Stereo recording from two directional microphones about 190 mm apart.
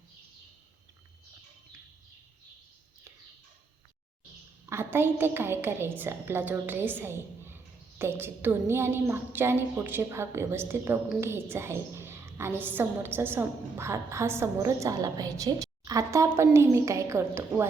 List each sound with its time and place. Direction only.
4.7 s a woman's voice: 10° right (ahead or behind)